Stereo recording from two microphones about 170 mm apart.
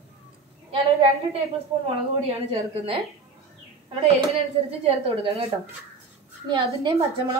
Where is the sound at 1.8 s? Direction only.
35° right (ahead or behind).